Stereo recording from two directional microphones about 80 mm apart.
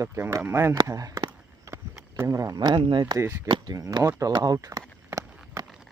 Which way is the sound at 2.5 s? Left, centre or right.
Right.